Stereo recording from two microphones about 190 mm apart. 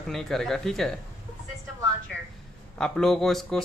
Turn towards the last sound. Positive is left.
turn(degrees=0)  # may be behind; listen again after turning